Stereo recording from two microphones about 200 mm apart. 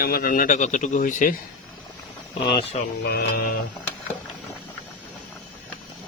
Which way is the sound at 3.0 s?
50° left (ahead or behind).